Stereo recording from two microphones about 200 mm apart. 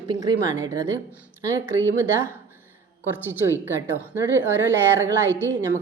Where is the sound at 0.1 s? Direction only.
20° right (ahead or behind).